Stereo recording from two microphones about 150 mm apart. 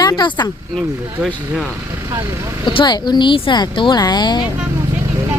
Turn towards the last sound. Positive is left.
turn(degrees=30)  # may be behind; listen again after turning